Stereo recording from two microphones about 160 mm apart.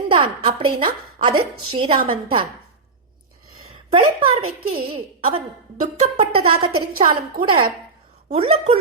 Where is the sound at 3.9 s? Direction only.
35° right (ahead or behind).